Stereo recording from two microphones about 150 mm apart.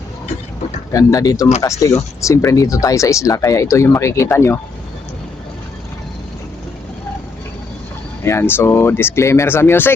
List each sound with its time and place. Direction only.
0.9 s speech: 25° left (ahead or behind)
8.2 s speech: 15° left (ahead or behind)